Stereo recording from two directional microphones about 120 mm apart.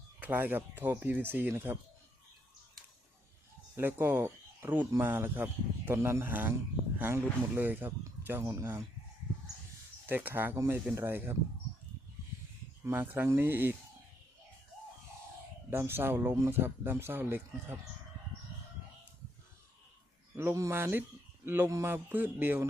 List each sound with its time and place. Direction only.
0.2 s speech: 15° right (ahead or behind)
3.8 s speech: 15° right (ahead or behind)
10.1 s speech: 15° right (ahead or behind)
12.8 s speech: 20° right (ahead or behind)
15.7 s speech: 20° right (ahead or behind)
20.3 s speech: 20° right (ahead or behind)